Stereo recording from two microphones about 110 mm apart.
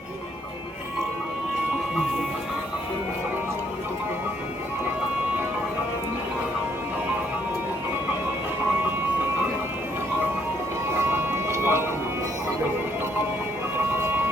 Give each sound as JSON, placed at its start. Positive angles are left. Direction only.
{"t": 11.0, "sound": "music", "side_deg": -20}